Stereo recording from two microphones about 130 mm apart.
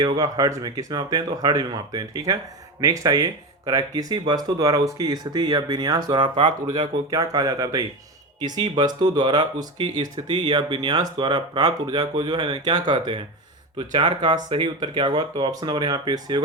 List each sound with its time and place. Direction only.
0.0 s speech: 30° right (ahead or behind)